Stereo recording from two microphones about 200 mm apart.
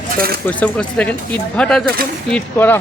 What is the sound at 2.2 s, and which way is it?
Speech, 5° left (ahead or behind).